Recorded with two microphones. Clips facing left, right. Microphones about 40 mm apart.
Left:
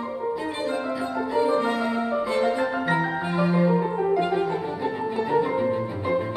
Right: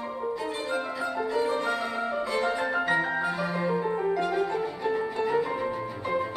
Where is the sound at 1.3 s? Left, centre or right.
Centre.